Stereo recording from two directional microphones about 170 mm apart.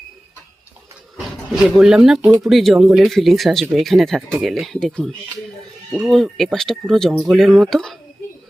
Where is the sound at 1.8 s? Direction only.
5° right (ahead or behind).